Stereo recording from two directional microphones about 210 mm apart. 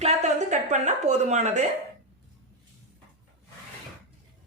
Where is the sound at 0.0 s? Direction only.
30° right (ahead or behind).